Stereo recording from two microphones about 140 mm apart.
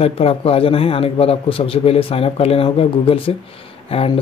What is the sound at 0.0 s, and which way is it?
A man's voice, 45° left (ahead or behind).